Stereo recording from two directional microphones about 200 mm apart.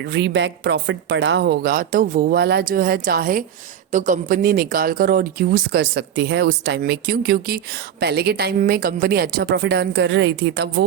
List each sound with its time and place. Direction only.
0.1 s speech: 60° right (ahead or behind)